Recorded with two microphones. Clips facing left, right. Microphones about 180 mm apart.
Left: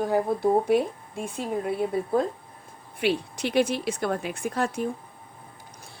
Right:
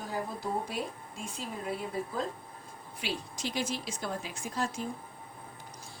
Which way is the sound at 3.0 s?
60° left (ahead or behind).